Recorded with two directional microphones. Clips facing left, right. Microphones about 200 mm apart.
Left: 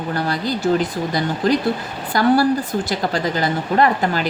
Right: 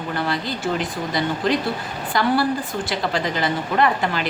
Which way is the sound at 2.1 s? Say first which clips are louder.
Left 5 dB; 40° left (ahead or behind).